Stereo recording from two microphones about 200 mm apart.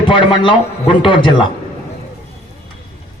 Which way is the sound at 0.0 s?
25° left (ahead or behind).